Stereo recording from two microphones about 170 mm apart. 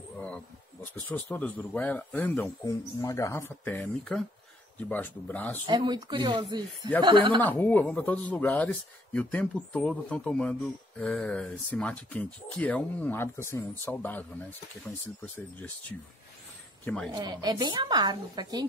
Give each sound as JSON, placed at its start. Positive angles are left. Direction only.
{"t": 1.0, "sound": "speech", "side_deg": 10}
{"t": 2.6, "sound": "speech", "side_deg": 20}
{"t": 5.7, "sound": "a woman's voice", "side_deg": -25}
{"t": 7.4, "sound": "speech", "side_deg": 10}
{"t": 15.2, "sound": "speech", "side_deg": 10}
{"t": 16.8, "sound": "speech", "side_deg": 5}
{"t": 17.1, "sound": "a woman's voice", "side_deg": -25}